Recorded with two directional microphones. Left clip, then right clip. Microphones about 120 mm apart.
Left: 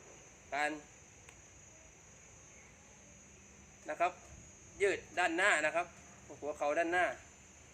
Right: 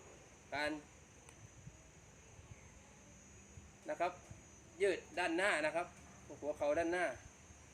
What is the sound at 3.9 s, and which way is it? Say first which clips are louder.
A man's voice: left 4 dB; 20° right (ahead or behind).